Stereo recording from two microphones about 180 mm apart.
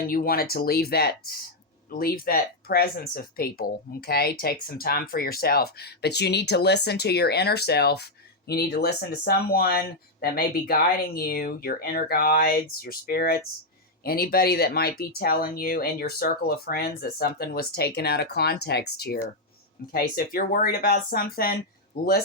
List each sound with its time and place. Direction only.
0.1 s speech: 55° left (ahead or behind)